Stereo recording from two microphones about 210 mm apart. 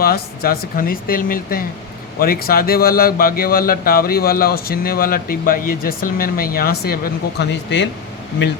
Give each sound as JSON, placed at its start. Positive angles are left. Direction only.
{"t": 0.0, "sound": "a man's voice", "side_deg": 45}